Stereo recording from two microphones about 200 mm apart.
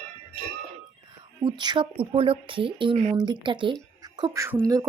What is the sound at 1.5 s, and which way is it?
Speech, 25° right (ahead or behind).